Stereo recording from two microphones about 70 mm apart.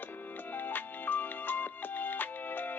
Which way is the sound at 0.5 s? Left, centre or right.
Left.